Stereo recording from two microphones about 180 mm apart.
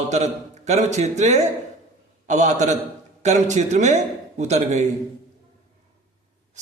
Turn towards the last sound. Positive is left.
turn(degrees=-40)  # may be behind; listen again after turning